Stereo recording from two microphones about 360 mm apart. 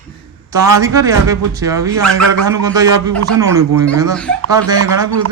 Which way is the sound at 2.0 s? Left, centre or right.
Right.